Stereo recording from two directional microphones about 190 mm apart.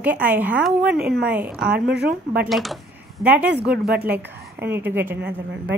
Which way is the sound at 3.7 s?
55° right (ahead or behind).